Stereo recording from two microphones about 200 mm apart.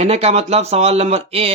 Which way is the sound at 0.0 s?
30° right (ahead or behind).